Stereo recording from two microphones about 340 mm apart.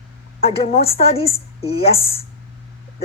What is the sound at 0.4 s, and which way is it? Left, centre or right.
A woman's voice, centre.